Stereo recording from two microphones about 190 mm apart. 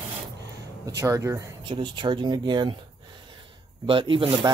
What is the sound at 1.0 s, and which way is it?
Speech, 15° right (ahead or behind).